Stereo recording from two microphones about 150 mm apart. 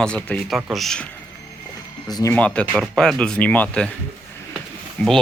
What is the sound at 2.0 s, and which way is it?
Speech, 25° left (ahead or behind).